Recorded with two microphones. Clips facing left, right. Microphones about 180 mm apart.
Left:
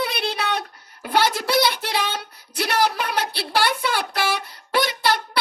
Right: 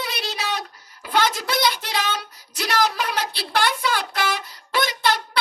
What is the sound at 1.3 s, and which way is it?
Child singing, 60° left (ahead or behind).